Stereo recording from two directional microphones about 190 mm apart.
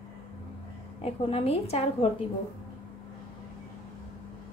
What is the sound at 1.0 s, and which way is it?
A woman's voice, 30° left (ahead or behind).